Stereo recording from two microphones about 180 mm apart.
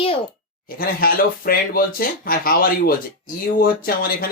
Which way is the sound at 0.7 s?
55° left (ahead or behind).